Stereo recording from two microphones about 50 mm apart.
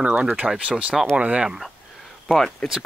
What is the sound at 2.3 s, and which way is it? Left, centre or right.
Speech, centre.